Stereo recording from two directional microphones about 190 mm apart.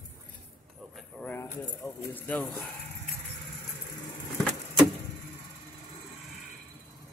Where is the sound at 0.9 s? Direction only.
10° left (ahead or behind).